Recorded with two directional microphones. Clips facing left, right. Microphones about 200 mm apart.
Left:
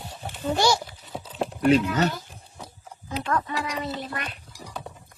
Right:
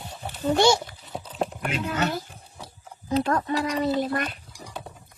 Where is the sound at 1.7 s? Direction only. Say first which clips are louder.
Left 11 dB; 35° left (ahead or behind).